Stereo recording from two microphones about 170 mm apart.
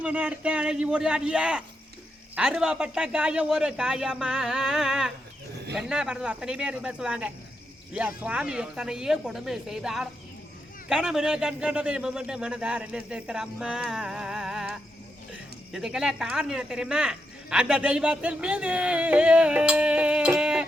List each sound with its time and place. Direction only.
0.0 s speech: 5° right (ahead or behind)